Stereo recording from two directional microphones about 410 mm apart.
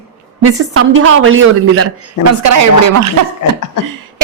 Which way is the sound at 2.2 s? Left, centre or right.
Left.